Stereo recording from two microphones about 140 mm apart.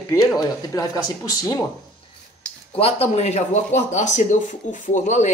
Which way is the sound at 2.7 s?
45° left (ahead or behind).